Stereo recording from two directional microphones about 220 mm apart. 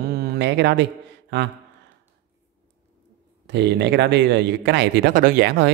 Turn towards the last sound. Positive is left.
turn(degrees=-45)  # may be behind; listen again after turning